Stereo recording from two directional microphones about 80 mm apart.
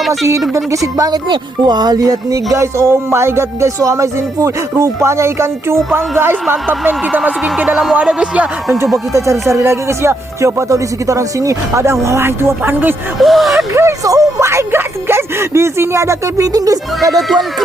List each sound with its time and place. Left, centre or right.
0.5 s speech: right
1.3 s speech: right
7.4 s speech: centre
9.1 s speech: right
13.1 s speech: centre
14.0 s speech: right
17.2 s speech: centre